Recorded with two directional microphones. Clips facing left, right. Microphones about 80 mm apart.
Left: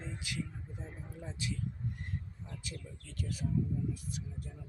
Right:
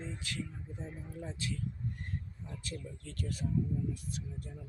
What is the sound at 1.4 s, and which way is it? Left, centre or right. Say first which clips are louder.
Speech: left 1 dB; centre.